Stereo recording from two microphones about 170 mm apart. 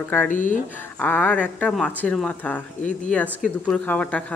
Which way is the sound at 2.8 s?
50° left (ahead or behind).